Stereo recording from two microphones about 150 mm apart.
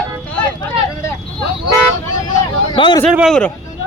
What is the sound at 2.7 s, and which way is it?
Speech, 35° left (ahead or behind).